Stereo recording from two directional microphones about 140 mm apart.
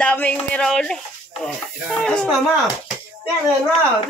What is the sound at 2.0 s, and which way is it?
Speech, 5° left (ahead or behind).